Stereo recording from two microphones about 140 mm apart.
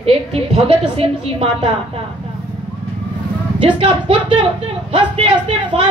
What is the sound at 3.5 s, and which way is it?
A woman's voice, 35° right (ahead or behind).